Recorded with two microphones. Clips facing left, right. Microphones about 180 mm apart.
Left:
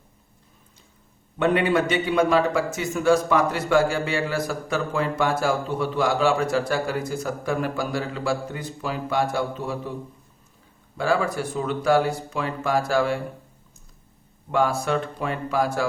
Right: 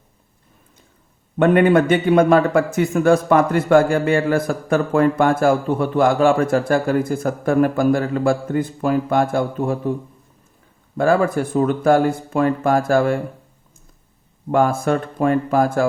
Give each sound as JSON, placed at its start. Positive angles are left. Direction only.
{"t": 1.4, "sound": "a man's voice", "side_deg": -55}
{"t": 10.9, "sound": "a man's voice", "side_deg": -50}
{"t": 14.5, "sound": "a man's voice", "side_deg": -50}